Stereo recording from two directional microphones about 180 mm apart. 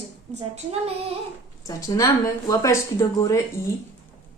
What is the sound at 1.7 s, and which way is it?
Speech, 20° left (ahead or behind).